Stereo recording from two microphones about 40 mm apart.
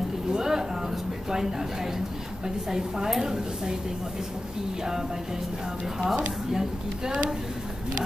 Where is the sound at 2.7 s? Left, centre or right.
Centre.